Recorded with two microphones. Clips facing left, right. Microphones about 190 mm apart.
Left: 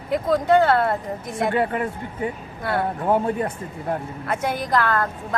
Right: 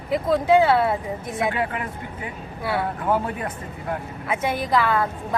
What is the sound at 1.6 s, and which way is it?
Speech, 40° left (ahead or behind).